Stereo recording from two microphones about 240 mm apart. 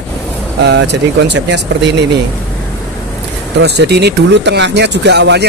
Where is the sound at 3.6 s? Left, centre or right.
Right.